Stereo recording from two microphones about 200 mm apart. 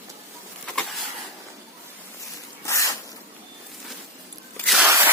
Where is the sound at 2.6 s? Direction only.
15° left (ahead or behind).